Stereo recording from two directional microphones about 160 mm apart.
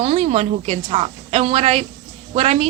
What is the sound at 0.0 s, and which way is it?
A woman's voice, 40° right (ahead or behind).